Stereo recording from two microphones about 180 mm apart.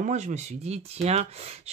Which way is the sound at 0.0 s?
40° right (ahead or behind).